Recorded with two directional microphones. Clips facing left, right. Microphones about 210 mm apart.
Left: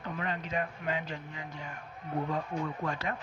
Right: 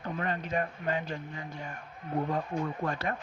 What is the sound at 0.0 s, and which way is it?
Speech, 50° right (ahead or behind).